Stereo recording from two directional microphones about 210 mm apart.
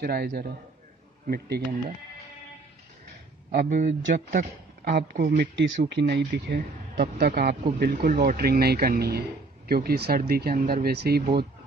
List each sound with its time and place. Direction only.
0.0 s speech: 50° right (ahead or behind)
3.5 s speech: 35° right (ahead or behind)
5.4 s speech: 55° right (ahead or behind)